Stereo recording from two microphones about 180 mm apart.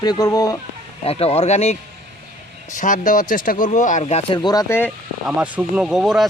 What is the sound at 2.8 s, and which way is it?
Speech, 45° left (ahead or behind).